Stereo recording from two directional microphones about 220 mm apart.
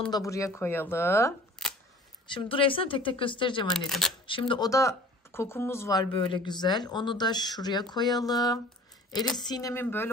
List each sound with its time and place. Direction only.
0.1 s speech: 15° left (ahead or behind)
2.2 s speech: 20° left (ahead or behind)
3.7 s speech: centre (ahead or behind)
4.3 s speech: 25° left (ahead or behind)